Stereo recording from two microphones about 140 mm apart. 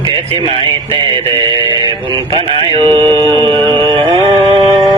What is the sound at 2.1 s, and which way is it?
Music, 35° right (ahead or behind).